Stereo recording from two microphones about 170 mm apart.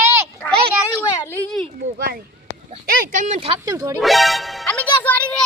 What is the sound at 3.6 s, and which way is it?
Speech, 20° right (ahead or behind).